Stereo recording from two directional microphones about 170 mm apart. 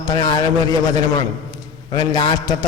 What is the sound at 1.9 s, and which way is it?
Speech, 25° left (ahead or behind).